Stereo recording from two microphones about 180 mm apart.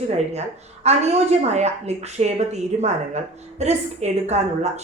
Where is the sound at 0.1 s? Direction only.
35° right (ahead or behind).